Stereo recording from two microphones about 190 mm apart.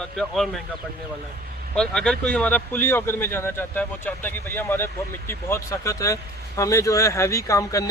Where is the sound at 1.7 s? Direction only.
5° left (ahead or behind).